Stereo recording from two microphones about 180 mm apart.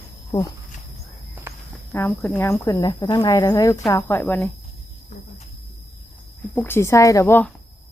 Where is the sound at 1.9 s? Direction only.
10° left (ahead or behind).